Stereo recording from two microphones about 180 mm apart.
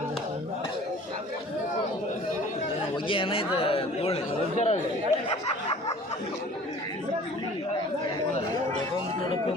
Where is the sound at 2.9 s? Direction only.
30° left (ahead or behind).